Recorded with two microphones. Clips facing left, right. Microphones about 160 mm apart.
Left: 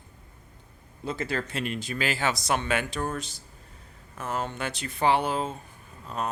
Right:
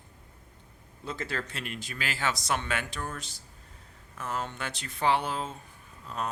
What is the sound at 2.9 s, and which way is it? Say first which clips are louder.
Speech: left 7 dB; 30° left (ahead or behind).